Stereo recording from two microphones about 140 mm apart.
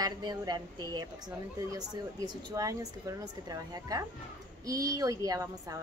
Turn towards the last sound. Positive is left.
turn(degrees=-25)  # may be behind; listen again after turning